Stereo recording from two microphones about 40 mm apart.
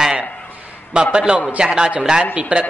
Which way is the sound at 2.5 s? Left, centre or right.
Right.